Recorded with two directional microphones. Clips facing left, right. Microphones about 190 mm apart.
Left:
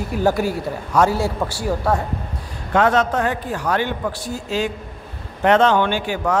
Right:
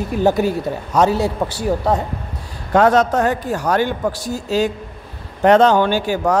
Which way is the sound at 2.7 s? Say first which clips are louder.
Right 4 dB; 40° right (ahead or behind).